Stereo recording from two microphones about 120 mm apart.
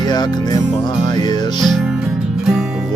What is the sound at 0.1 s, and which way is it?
Speech, 35° left (ahead or behind).